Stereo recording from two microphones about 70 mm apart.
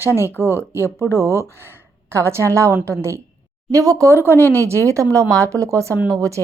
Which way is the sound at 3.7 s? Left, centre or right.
Right.